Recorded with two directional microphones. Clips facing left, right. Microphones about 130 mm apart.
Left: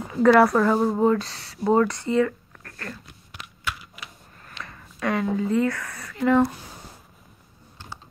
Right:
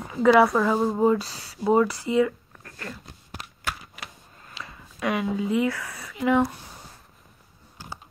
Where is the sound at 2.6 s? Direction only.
15° right (ahead or behind).